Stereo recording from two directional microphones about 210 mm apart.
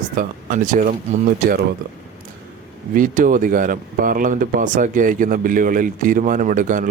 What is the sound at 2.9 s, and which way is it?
Speech, 40° right (ahead or behind).